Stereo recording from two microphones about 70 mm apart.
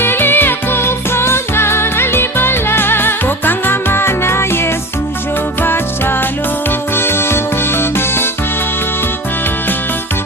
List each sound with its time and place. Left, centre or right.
0.0 s music: left